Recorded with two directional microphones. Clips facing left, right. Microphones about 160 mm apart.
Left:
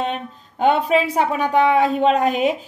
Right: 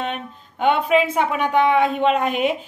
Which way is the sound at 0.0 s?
35° left (ahead or behind).